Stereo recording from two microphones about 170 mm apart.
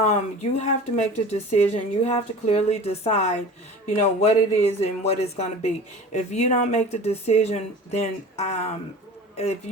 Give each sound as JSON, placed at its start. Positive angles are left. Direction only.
{"t": 0.0, "sound": "speech", "side_deg": 40}